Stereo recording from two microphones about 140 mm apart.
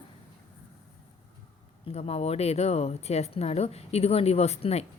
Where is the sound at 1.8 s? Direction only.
45° left (ahead or behind).